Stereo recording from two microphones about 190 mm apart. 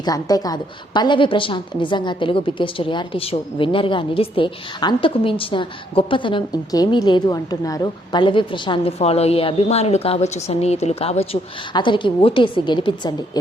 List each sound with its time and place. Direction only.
0.0 s a woman's voice: 20° left (ahead or behind)